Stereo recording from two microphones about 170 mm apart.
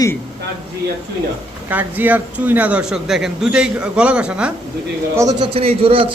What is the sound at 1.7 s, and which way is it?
A man's voice, 10° right (ahead or behind).